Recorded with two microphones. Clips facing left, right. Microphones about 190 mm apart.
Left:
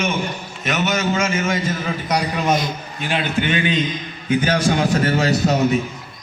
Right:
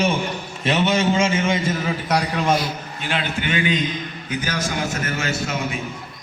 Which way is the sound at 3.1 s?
20° left (ahead or behind).